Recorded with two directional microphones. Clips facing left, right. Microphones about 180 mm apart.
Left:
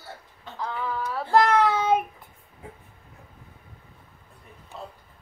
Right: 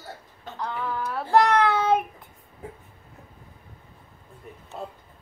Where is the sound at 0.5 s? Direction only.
Centre (ahead or behind).